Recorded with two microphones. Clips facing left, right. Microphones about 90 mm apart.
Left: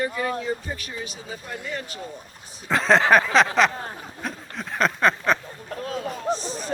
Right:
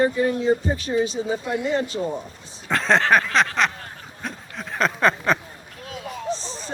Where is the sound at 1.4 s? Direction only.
80° right.